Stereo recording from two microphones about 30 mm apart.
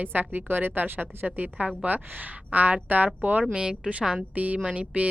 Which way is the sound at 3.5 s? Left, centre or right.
Right.